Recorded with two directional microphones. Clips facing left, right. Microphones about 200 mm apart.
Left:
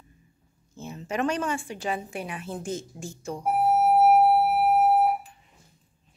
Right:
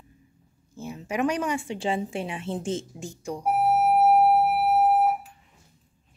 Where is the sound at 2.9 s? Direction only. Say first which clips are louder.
Right 1 dB; 15° right (ahead or behind).